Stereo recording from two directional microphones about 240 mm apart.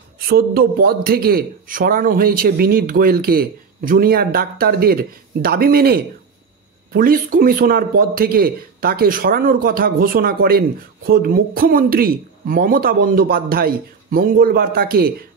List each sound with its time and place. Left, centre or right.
0.3 s a man's voice: right